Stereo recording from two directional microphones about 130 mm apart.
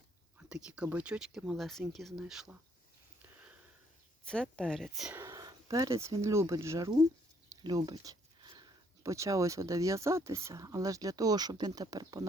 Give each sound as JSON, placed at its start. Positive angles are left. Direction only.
{"t": 0.3, "sound": "speech", "side_deg": -5}
{"t": 4.3, "sound": "speech", "side_deg": 5}
{"t": 5.1, "sound": "speech", "side_deg": -25}
{"t": 7.6, "sound": "a sound", "side_deg": -35}
{"t": 9.0, "sound": "speech", "side_deg": -25}